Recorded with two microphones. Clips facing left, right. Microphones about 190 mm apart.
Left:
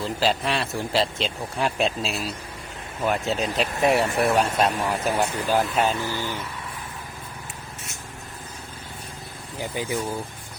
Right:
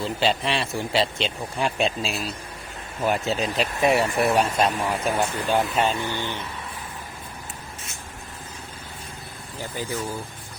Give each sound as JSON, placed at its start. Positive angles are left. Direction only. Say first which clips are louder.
{"t": 0.0, "sound": "speech", "louder": "even", "side_deg": 0}
{"t": 9.6, "sound": "speech", "louder": "left 3 dB", "side_deg": 15}